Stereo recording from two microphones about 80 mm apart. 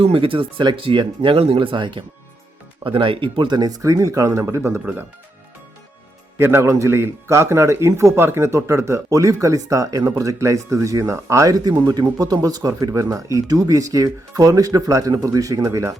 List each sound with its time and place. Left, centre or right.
0.0 s speech: right
6.4 s a man's voice: right